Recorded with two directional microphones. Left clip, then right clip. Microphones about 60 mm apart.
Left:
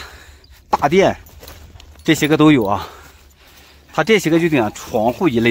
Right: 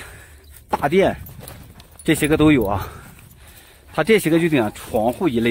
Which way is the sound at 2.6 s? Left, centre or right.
Left.